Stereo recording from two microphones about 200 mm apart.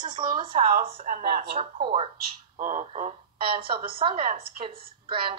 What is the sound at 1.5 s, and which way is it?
Speech, 25° right (ahead or behind).